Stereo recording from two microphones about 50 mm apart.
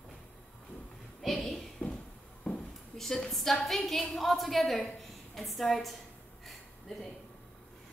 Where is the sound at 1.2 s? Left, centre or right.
Centre.